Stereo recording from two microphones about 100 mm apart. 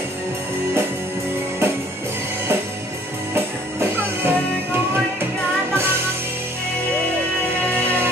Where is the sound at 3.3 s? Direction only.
25° right (ahead or behind).